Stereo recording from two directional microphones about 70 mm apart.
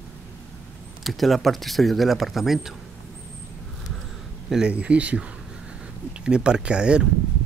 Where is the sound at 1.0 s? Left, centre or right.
Centre.